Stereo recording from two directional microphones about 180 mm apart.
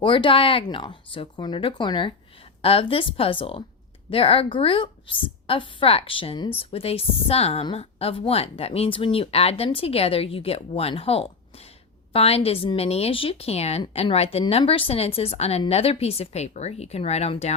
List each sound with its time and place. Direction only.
0.0 s a woman's voice: 30° left (ahead or behind)